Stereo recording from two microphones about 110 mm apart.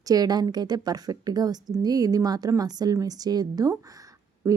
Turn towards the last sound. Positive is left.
turn(degrees=-30)  # may be behind; listen again after turning